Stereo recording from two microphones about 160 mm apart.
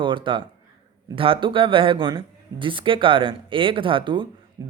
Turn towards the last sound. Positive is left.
turn(degrees=-25)  # may be behind; listen again after turning